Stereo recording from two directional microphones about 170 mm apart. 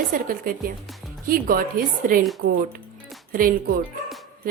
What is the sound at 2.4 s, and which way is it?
Speech, 70° right (ahead or behind).